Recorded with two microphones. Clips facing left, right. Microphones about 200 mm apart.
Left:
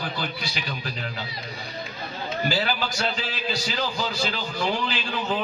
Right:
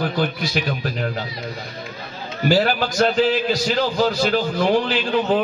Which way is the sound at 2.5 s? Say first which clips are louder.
Right 12 dB; 50° right (ahead or behind).